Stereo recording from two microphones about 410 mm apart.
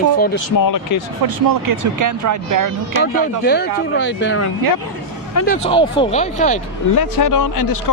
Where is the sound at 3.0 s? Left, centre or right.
Left.